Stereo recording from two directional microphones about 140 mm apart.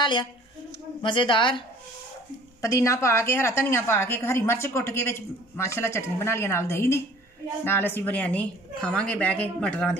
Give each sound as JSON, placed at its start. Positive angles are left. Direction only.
{"t": 0.0, "sound": "a woman's voice", "side_deg": 35}
{"t": 2.6, "sound": "a woman's voice", "side_deg": 20}